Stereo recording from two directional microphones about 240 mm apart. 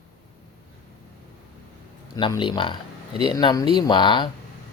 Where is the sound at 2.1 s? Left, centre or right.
Centre.